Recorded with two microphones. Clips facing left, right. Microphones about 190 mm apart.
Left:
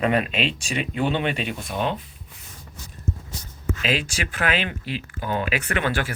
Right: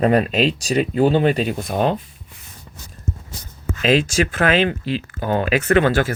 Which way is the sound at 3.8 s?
45° right (ahead or behind).